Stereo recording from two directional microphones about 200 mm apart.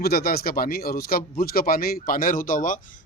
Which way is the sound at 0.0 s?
50° left (ahead or behind).